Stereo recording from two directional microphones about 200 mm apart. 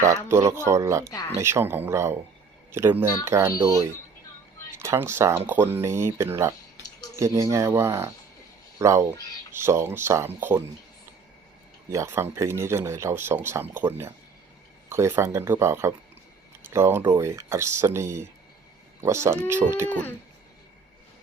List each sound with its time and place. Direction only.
0.1 s speech: 15° right (ahead or behind)
11.9 s speech: 15° right (ahead or behind)
19.9 s owl: 10° left (ahead or behind)